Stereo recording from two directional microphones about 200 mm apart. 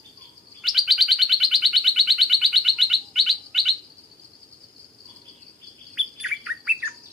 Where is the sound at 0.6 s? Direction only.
Centre (ahead or behind).